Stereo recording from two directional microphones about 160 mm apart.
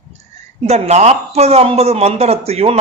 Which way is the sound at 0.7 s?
45° right (ahead or behind).